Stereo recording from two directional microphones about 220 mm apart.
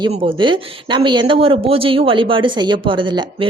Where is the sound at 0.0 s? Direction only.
20° right (ahead or behind).